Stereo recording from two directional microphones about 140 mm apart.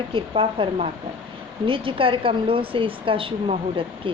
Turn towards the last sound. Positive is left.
turn(degrees=-40)  # may be behind; listen again after turning